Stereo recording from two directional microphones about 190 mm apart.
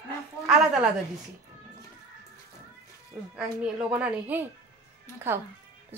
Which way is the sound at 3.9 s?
10° right (ahead or behind).